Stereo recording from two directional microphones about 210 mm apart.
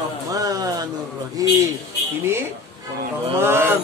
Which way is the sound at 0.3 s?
15° right (ahead or behind).